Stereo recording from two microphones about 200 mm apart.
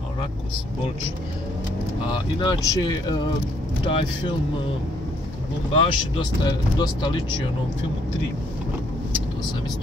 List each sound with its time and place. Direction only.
2.4 s speech: 20° left (ahead or behind)
5.8 s speech: 20° left (ahead or behind)